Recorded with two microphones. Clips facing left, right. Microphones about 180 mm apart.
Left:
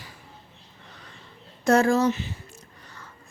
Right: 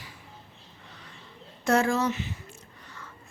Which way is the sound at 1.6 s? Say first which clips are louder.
Left 5 dB; 40° left (ahead or behind).